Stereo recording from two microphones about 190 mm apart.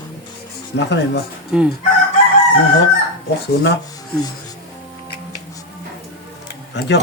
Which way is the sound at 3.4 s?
60° left (ahead or behind).